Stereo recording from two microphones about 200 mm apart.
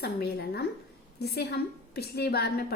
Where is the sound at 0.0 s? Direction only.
55° left (ahead or behind).